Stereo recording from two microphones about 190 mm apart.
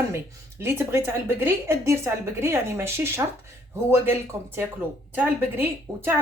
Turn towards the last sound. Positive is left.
turn(degrees=-10)  # may be behind; listen again after turning